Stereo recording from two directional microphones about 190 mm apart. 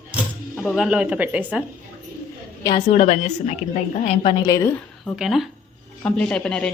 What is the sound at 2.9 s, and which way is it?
A woman's voice, 35° left (ahead or behind).